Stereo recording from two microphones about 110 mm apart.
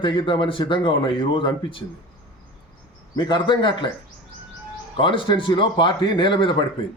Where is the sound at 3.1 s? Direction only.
40° left (ahead or behind).